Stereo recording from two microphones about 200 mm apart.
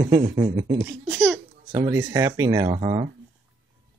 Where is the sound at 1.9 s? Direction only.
15° right (ahead or behind).